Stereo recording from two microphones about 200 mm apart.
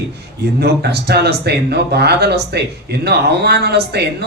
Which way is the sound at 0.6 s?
55° right (ahead or behind).